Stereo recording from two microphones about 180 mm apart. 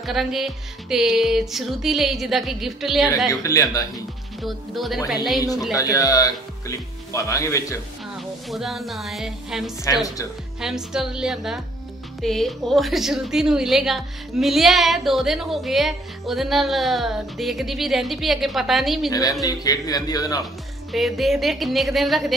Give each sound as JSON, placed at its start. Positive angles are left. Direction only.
{"t": 0.0, "sound": "a woman's voice", "side_deg": 0}
{"t": 3.3, "sound": "a man's voice", "side_deg": 20}
{"t": 3.9, "sound": "a woman's voice", "side_deg": 0}
{"t": 5.8, "sound": "speech", "side_deg": 20}
{"t": 8.2, "sound": "speech", "side_deg": 0}
{"t": 9.9, "sound": "speech", "side_deg": 15}
{"t": 10.6, "sound": "a woman's voice", "side_deg": 0}
{"t": 19.4, "sound": "a man's voice", "side_deg": 20}
{"t": 20.9, "sound": "a woman's voice", "side_deg": 0}